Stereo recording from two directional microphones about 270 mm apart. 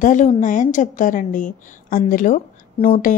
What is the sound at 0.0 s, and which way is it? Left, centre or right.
A woman's voice, left.